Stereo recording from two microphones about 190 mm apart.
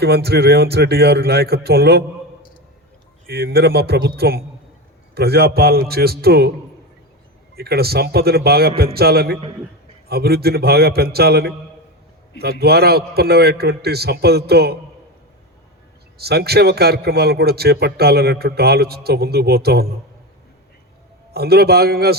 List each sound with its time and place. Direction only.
0.0 s a man's voice: 60° right (ahead or behind)
3.2 s a man's voice: 55° right (ahead or behind)
7.5 s a man's voice: 55° right (ahead or behind)
16.1 s a man's voice: 55° right (ahead or behind)
21.3 s a man's voice: 55° right (ahead or behind)